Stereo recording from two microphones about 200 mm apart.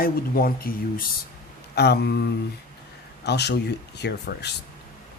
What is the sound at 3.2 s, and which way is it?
Speech, 55° left (ahead or behind).